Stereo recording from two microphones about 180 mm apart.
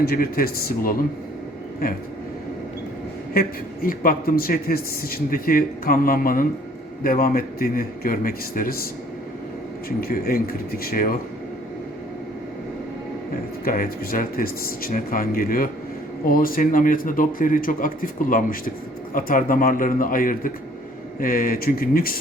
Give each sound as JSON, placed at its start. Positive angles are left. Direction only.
{"t": 0.0, "sound": "speech", "side_deg": 55}
{"t": 3.8, "sound": "speech", "side_deg": 55}
{"t": 10.0, "sound": "speech", "side_deg": 55}
{"t": 13.7, "sound": "speech", "side_deg": 50}